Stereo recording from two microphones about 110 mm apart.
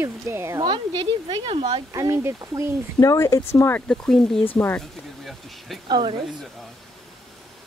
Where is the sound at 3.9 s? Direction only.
5° left (ahead or behind).